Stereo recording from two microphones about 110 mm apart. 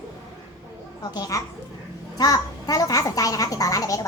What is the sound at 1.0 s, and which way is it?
A child's voice, 35° left (ahead or behind).